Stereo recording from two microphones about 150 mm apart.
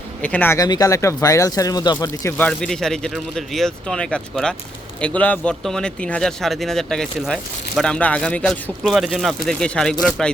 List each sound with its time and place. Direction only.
0.2 s speech: 10° left (ahead or behind)
0.6 s speech: 25° left (ahead or behind)
2.4 s speech: 5° left (ahead or behind)